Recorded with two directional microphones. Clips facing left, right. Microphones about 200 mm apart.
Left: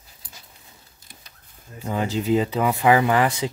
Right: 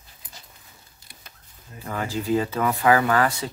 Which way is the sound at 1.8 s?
20° left (ahead or behind).